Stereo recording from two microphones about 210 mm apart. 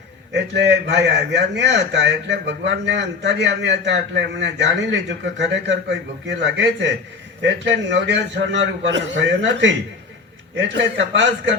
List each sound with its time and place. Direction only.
0.3 s a man's voice: 55° right (ahead or behind)